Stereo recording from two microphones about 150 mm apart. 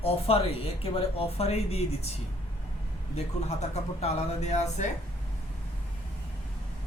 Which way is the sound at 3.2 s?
45° left (ahead or behind).